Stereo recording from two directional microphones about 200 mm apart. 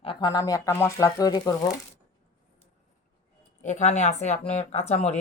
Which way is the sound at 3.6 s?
35° left (ahead or behind).